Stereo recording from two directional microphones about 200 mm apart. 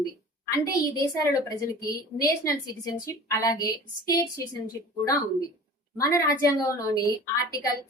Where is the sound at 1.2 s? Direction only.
15° left (ahead or behind).